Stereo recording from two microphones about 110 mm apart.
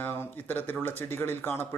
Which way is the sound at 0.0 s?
20° left (ahead or behind).